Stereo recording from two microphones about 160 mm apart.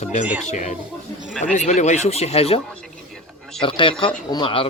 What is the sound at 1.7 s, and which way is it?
Speech, 45° left (ahead or behind).